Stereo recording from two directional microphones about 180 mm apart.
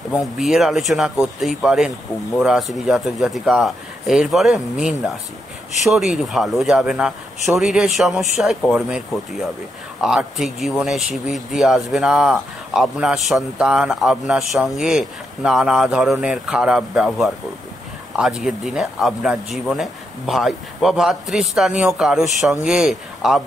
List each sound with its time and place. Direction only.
0.1 s speech: centre (ahead or behind)